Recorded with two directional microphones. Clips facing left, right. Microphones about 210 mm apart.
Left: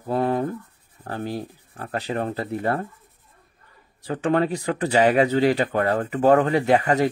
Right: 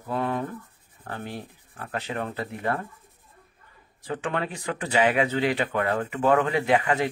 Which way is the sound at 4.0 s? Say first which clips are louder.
Left 8 dB; 35° left (ahead or behind).